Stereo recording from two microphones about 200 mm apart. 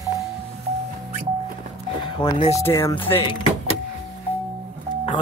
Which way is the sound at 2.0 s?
25° left (ahead or behind).